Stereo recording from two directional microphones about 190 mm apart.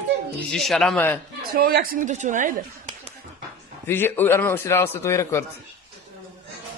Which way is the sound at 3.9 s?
10° left (ahead or behind).